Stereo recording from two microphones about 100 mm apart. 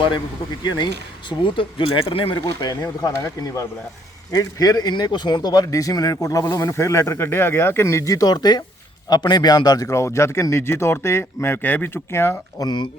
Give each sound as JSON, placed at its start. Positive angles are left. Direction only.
{"t": 0.6, "sound": "speech", "side_deg": 45}
{"t": 1.3, "sound": "speech", "side_deg": 60}
{"t": 3.0, "sound": "a man's voice", "side_deg": 35}
{"t": 12.5, "sound": "speech", "side_deg": 45}